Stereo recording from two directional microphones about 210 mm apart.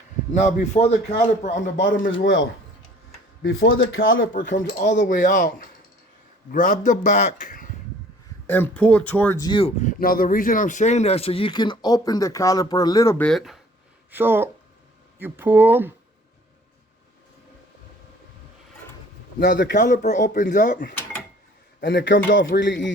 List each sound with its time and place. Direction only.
0.3 s a man's voice: 35° left (ahead or behind)
2.2 s music: 60° left (ahead or behind)
3.4 s speech: 70° left (ahead or behind)
4.5 s a man's voice: 40° left (ahead or behind)
8.4 s speech: 10° left (ahead or behind)
9.5 s speech: 25° left (ahead or behind); by 15.9 s 10° right (ahead or behind)
19.4 s music: 55° left (ahead or behind)
19.7 s a man's voice: 35° left (ahead or behind)
21.8 s a man's voice: 55° left (ahead or behind)
22.4 s music: 55° left (ahead or behind)